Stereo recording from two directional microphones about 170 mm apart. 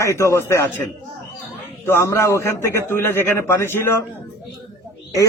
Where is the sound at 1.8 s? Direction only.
15° left (ahead or behind).